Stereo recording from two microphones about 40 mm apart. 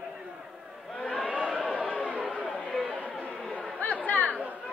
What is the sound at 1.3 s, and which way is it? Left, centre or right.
Chatter, right.